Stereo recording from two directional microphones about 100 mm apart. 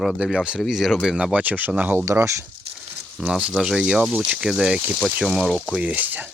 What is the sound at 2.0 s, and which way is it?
Speech, 30° right (ahead or behind).